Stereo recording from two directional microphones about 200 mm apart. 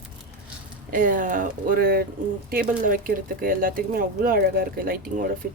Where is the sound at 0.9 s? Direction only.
45° right (ahead or behind).